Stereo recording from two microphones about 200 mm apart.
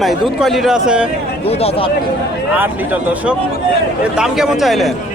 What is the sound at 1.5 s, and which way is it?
Speech, 30° left (ahead or behind).